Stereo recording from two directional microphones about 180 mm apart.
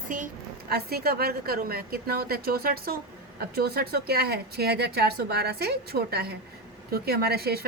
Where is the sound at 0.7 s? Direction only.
60° right (ahead or behind).